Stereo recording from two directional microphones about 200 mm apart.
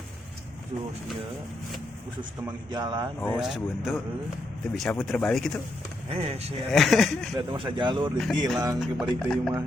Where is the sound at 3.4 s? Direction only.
Centre (ahead or behind).